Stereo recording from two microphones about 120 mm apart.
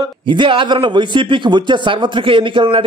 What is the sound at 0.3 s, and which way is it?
A man's voice, 45° right (ahead or behind).